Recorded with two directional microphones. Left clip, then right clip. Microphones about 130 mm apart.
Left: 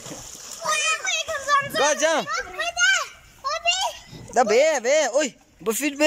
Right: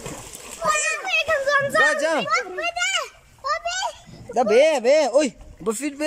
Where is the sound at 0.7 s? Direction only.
65° right (ahead or behind).